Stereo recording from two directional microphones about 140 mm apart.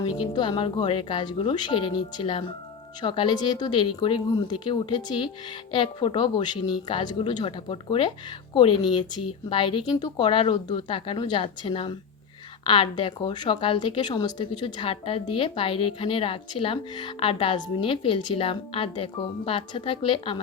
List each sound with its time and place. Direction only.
0.2 s speech: 30° left (ahead or behind)